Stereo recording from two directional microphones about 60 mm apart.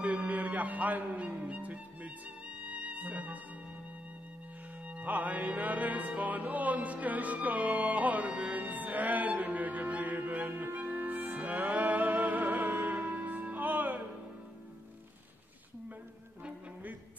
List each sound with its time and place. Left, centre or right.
0.0 s music: right
4.9 s music: right